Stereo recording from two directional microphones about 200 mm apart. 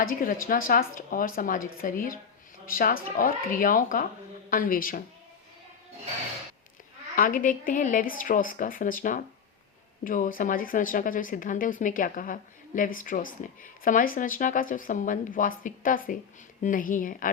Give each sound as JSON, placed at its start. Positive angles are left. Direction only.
{"t": 0.0, "sound": "speech", "side_deg": 45}
{"t": 7.2, "sound": "a woman's voice", "side_deg": 45}